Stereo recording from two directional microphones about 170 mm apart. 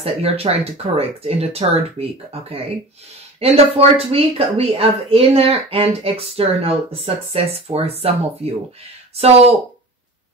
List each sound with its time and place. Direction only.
0.0 s speech: 35° right (ahead or behind)
3.3 s speech: 35° right (ahead or behind)